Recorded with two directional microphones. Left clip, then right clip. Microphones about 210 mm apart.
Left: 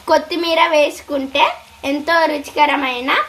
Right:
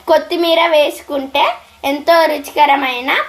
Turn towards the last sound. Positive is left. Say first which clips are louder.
# right 2 dB
turn(degrees=15)  # may be behind; listen again after turning